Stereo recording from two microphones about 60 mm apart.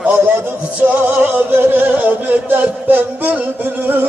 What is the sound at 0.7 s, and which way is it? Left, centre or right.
Music, right.